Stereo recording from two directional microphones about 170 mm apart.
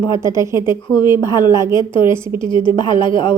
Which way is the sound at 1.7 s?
30° left (ahead or behind).